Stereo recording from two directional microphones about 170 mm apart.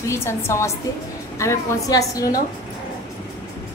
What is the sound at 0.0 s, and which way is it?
A woman's voice, 15° left (ahead or behind).